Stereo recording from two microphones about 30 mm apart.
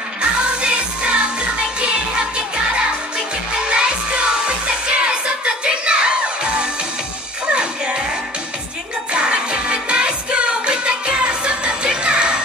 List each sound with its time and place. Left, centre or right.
0.2 s music: right
3.6 s music: right
9.1 s music: right